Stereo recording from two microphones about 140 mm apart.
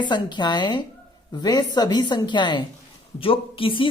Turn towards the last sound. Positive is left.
turn(degrees=40)  # may be behind; listen again after turning